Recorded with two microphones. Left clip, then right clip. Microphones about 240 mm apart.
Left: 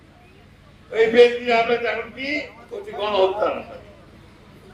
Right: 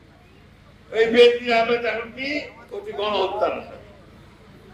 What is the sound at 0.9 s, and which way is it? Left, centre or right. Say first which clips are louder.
A man's voice: even; right.